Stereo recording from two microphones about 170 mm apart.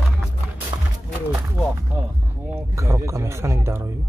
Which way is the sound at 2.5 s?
15° right (ahead or behind).